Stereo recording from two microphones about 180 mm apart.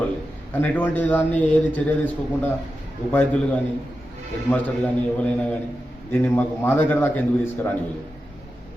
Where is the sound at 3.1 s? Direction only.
10° left (ahead or behind).